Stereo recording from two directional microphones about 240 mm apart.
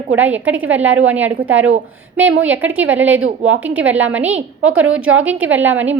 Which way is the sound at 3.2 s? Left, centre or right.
Right.